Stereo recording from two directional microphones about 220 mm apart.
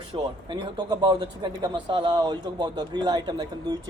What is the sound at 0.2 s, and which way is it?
Speech, 20° right (ahead or behind).